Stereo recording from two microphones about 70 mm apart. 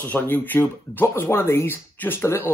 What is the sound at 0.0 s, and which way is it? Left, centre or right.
Speech, left.